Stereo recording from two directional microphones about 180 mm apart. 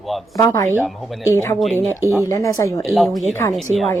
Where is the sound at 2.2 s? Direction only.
15° left (ahead or behind).